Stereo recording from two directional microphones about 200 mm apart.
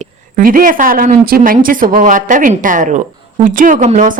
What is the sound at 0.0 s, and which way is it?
Speech, 45° right (ahead or behind).